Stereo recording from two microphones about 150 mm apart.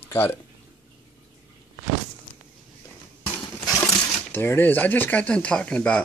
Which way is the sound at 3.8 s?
15° left (ahead or behind).